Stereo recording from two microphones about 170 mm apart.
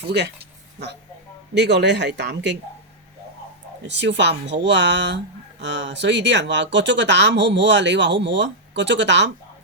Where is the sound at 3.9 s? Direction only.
90° right.